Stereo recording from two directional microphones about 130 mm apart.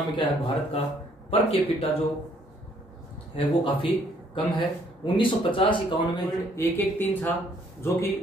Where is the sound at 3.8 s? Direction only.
40° left (ahead or behind).